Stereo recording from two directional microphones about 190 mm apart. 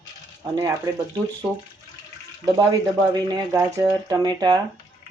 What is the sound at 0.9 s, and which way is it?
Speech, 20° right (ahead or behind).